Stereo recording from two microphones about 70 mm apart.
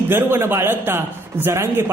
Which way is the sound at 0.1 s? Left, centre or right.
Right.